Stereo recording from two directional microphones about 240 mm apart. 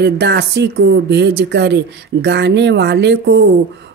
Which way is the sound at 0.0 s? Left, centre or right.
Right.